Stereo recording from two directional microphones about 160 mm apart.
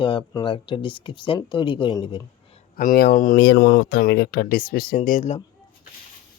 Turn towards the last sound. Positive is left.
turn(degrees=50)  # may be behind; listen again after turning